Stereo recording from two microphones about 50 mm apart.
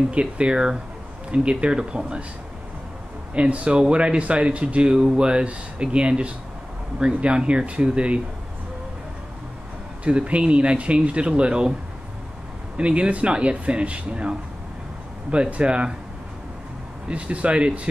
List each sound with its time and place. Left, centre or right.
0.1 s speech: right
3.3 s speech: right
10.0 s speech: right
12.7 s speech: right
15.3 s speech: right
17.1 s speech: right